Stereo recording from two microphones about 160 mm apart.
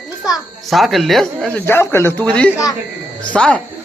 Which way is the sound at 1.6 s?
15° left (ahead or behind).